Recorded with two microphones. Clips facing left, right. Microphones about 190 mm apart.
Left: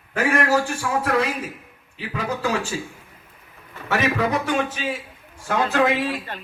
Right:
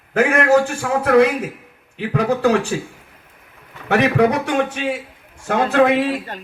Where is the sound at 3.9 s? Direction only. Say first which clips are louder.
Right 6 dB; 65° right (ahead or behind).